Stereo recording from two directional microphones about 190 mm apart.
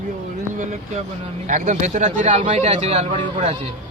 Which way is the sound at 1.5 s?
40° right (ahead or behind).